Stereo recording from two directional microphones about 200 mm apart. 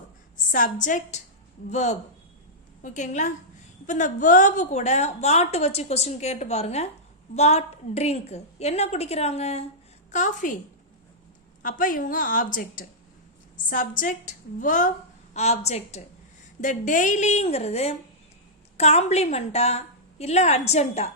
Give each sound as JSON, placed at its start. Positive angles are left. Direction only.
{"t": 0.5, "sound": "a woman's voice", "side_deg": 40}
{"t": 11.6, "sound": "a woman's voice", "side_deg": 40}
{"t": 13.7, "sound": "a woman's voice", "side_deg": 40}